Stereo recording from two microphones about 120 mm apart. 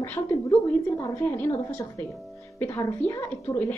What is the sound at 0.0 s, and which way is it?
A woman's voice, 15° left (ahead or behind).